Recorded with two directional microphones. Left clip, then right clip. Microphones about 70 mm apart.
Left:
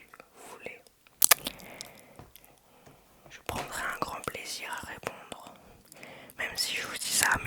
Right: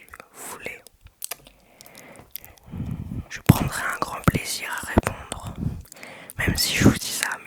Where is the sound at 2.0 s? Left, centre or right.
Right.